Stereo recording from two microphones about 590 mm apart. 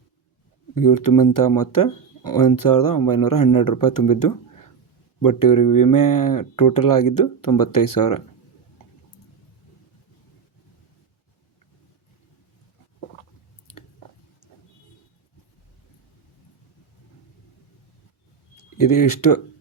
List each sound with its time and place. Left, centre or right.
0.8 s speech: left
5.4 s speech: left
18.5 s speech: left